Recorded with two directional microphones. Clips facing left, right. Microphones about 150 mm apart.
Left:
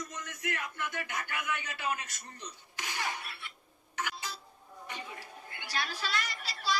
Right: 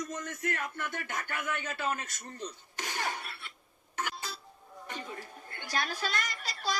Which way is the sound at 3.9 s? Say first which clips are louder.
Right 1 dB; 50° right (ahead or behind).